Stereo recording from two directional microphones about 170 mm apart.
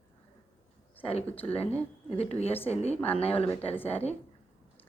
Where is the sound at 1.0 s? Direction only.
35° left (ahead or behind).